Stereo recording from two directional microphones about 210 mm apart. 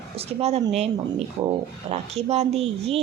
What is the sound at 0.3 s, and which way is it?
Speech, 30° right (ahead or behind).